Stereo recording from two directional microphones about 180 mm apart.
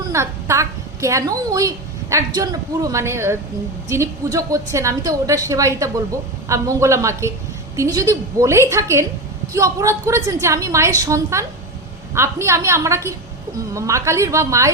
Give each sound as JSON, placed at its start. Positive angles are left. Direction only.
{"t": 0.1, "sound": "a woman's voice", "side_deg": -15}